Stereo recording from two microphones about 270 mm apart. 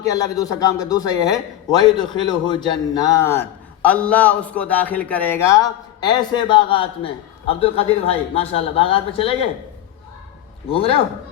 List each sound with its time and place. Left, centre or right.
0.0 s a man's voice: centre
10.7 s speech: left